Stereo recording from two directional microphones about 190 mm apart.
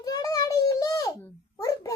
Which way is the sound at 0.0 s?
20° left (ahead or behind).